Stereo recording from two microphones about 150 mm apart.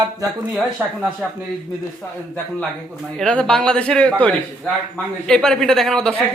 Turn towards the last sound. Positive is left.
turn(degrees=5)  # may be behind; listen again after turning